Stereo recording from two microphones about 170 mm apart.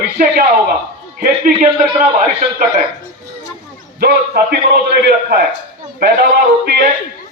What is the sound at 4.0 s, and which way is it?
Speech, 65° right (ahead or behind).